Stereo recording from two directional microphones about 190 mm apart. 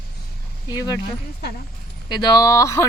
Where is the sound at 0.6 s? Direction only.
20° left (ahead or behind).